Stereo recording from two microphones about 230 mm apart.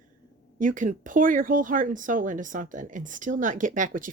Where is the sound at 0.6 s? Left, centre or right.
Right.